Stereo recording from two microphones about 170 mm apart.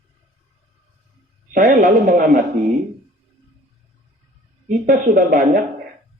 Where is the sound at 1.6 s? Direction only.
50° right (ahead or behind).